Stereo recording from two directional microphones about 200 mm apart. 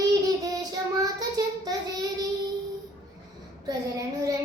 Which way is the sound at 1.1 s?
20° right (ahead or behind).